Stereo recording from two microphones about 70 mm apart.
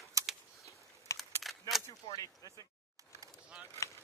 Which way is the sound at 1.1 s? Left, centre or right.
Left.